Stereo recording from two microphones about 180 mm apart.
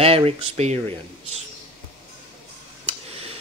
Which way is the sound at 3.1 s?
35° right (ahead or behind).